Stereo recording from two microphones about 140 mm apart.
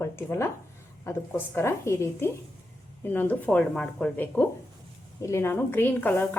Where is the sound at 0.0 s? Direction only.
20° left (ahead or behind).